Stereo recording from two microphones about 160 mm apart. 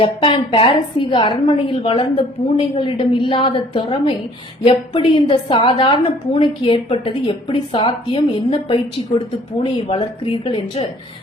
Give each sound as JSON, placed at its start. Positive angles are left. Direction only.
{"t": 0.0, "sound": "a woman's voice", "side_deg": 35}